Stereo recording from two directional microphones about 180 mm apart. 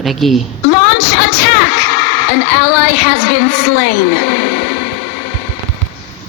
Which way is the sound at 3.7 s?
65° left (ahead or behind).